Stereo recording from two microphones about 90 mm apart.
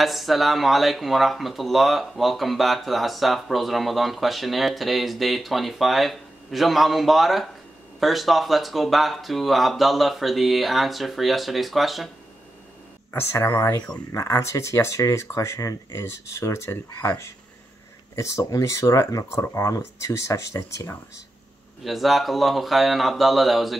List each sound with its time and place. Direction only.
0.0 s speech: centre (ahead or behind)
13.1 s speech: 25° left (ahead or behind)
18.1 s speech: 30° left (ahead or behind)
21.8 s speech: centre (ahead or behind)